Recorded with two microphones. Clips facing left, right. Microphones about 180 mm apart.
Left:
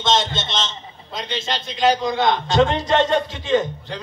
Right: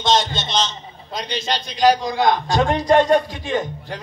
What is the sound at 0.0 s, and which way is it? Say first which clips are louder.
A man's voice: right 1 dB; 25° left (ahead or behind).